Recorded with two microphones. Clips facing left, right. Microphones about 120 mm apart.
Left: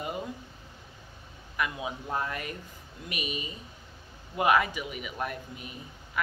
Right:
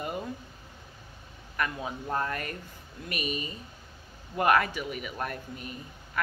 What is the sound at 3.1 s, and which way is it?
Speech, 45° right (ahead or behind).